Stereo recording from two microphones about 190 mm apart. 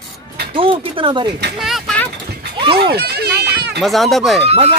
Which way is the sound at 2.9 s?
55° right (ahead or behind).